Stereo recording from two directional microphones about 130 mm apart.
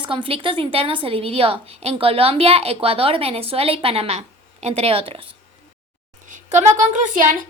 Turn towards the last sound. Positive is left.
turn(degrees=-90)